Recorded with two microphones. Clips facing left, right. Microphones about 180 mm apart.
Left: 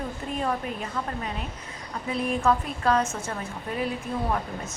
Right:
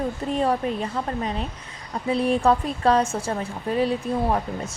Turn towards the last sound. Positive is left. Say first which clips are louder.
# right 5 dB
turn(degrees=-30)  # may be behind; listen again after turning